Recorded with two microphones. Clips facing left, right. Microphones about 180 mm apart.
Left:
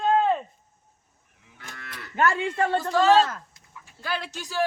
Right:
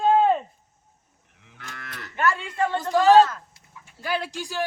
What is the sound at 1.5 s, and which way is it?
Moo, 55° right (ahead or behind).